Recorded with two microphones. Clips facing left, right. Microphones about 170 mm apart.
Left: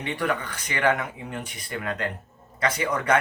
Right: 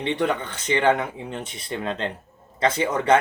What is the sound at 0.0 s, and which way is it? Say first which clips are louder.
Speech: right 4 dB; 25° right (ahead or behind).